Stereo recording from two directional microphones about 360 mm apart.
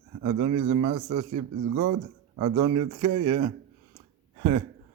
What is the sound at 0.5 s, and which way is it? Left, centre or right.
Speech, right.